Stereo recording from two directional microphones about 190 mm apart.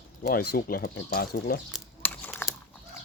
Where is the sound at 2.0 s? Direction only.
5° left (ahead or behind).